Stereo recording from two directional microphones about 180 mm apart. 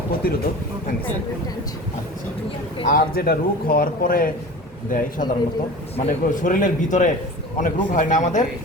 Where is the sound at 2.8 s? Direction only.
55° left (ahead or behind).